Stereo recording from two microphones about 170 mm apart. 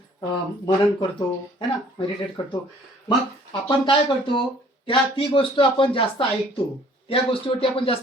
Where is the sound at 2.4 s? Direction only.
25° left (ahead or behind).